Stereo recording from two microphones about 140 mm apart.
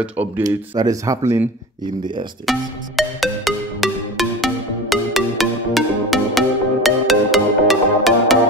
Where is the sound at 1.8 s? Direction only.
35° right (ahead or behind).